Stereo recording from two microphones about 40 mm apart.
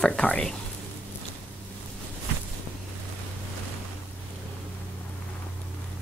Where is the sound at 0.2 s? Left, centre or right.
Left.